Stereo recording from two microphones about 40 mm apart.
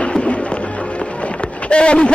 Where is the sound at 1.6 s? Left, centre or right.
Left.